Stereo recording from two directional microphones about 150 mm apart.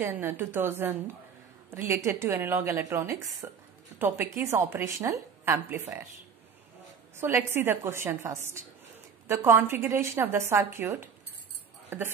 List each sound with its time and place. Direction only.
0.0 s a woman's voice: 15° right (ahead or behind)
7.2 s a woman's voice: 15° right (ahead or behind)